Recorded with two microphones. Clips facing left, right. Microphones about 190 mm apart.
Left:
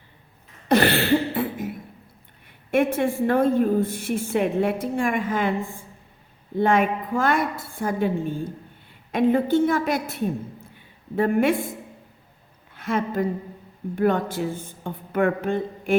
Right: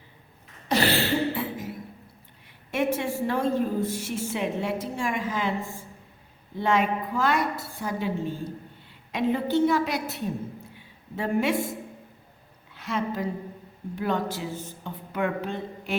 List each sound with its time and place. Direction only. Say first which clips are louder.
0.7 s a sound: left 5 dB; 55° left (ahead or behind)
2.6 s a woman's voice: left 5 dB; 55° left (ahead or behind)
12.7 s a woman's voice: left 5 dB; 50° left (ahead or behind)